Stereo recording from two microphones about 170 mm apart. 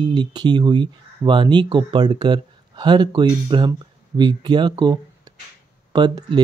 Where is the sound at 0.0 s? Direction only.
25° right (ahead or behind).